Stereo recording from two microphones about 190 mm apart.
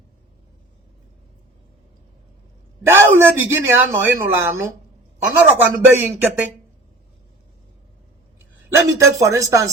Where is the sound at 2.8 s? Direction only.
15° right (ahead or behind).